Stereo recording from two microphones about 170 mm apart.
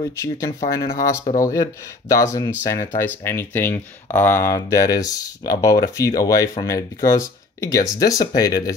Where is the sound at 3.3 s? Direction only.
15° left (ahead or behind).